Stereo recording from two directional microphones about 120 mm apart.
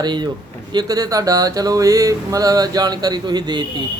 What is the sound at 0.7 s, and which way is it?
Mantra, 35° right (ahead or behind).